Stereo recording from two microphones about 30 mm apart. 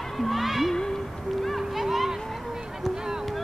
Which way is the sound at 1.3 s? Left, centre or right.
Centre.